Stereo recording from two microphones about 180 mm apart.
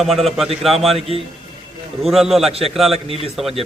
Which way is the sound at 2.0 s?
Centre (ahead or behind).